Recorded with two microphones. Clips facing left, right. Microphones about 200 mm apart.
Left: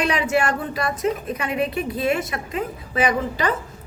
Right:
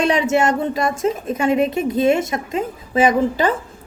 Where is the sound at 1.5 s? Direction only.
45° right (ahead or behind).